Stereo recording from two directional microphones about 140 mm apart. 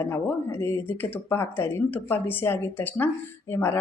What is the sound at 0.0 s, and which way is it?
Speech, 15° left (ahead or behind).